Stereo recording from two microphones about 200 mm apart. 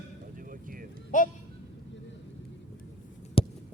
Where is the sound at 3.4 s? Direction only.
30° left (ahead or behind).